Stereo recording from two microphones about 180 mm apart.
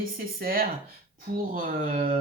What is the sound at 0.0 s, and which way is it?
Speech, 55° right (ahead or behind).